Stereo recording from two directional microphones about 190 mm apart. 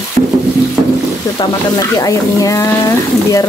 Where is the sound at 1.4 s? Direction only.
20° left (ahead or behind).